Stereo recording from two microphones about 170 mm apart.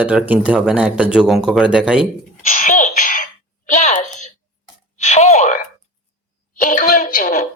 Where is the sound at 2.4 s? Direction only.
50° left (ahead or behind).